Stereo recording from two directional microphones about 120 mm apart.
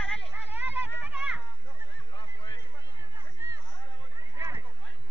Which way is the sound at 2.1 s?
40° left (ahead or behind).